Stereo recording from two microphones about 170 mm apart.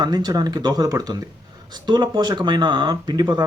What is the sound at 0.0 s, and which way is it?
Speech, 25° right (ahead or behind).